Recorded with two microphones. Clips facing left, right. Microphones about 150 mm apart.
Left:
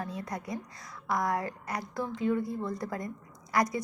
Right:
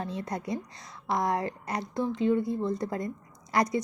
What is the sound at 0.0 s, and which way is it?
A woman's voice, 25° right (ahead or behind).